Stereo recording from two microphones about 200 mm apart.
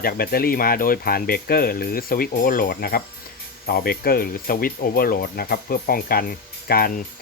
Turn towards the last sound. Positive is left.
turn(degrees=50)  # may be behind; listen again after turning